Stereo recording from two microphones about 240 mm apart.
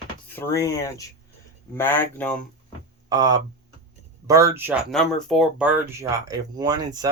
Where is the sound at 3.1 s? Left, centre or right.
Centre.